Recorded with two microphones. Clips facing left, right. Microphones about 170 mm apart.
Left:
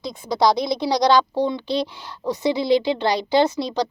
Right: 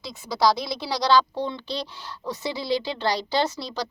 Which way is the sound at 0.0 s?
20° left (ahead or behind).